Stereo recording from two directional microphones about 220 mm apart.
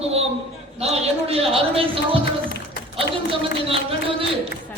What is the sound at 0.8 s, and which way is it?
A woman's voice, 30° right (ahead or behind).